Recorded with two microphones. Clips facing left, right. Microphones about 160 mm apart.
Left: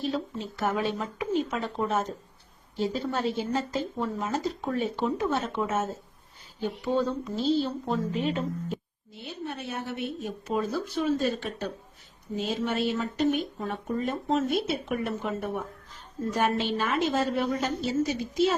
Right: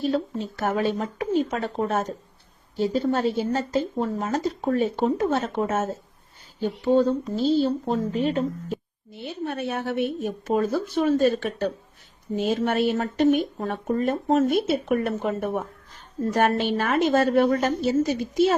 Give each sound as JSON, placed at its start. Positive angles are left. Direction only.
{"t": 0.1, "sound": "speech", "side_deg": -45}
{"t": 6.6, "sound": "speech", "side_deg": -30}
{"t": 9.2, "sound": "a woman's voice", "side_deg": -60}
{"t": 16.3, "sound": "a woman's voice", "side_deg": -60}